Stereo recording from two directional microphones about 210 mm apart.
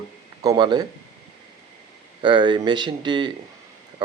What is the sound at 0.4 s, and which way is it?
Speech, 20° right (ahead or behind).